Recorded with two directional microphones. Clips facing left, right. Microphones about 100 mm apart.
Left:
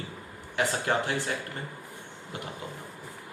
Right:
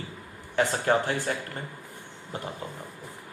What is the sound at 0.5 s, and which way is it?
Speech, 35° right (ahead or behind).